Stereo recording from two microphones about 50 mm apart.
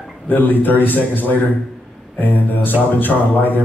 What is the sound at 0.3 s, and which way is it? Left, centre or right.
Speech, left.